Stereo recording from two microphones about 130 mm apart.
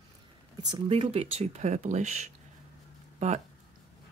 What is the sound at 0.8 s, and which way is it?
Speech, 45° right (ahead or behind).